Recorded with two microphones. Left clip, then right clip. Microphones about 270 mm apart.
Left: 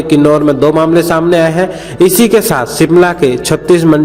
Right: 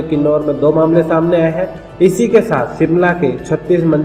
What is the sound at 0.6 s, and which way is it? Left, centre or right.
A man's voice, left.